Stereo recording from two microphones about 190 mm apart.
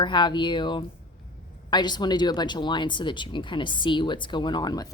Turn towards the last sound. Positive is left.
turn(degrees=20)  # may be behind; listen again after turning